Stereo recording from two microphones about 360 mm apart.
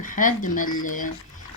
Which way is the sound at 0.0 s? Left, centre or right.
Left.